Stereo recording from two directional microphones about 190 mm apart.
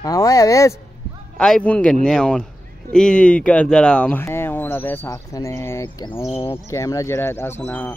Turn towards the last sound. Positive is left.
turn(degrees=10)  # may be behind; listen again after turning